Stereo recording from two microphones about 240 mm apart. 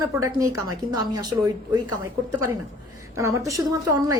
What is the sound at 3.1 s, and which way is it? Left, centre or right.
A woman's voice, centre.